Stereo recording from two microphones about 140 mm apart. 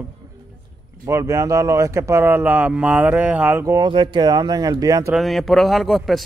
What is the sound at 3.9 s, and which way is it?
Speech, 35° right (ahead or behind).